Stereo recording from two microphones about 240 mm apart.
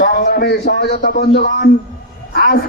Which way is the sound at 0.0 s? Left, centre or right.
Left.